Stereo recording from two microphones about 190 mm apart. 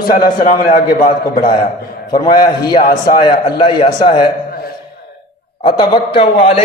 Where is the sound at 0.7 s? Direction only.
50° left (ahead or behind).